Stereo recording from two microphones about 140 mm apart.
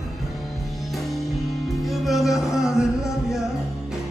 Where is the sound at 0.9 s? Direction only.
Centre (ahead or behind).